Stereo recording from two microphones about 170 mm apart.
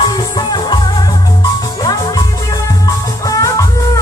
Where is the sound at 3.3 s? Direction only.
20° left (ahead or behind).